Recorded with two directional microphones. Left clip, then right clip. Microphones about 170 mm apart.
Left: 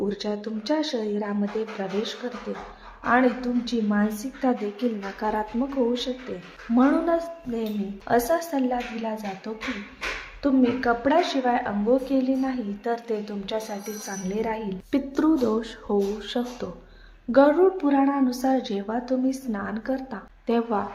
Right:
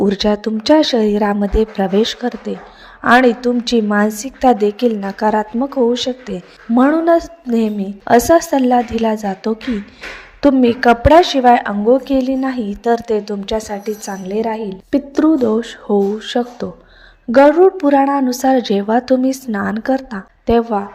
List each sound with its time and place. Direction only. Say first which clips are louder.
0.0 s a woman's voice: right 13 dB; 50° right (ahead or behind)